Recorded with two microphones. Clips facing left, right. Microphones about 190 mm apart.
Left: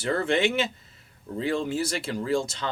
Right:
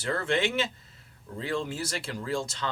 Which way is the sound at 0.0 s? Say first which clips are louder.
Left 4 dB; 20° left (ahead or behind).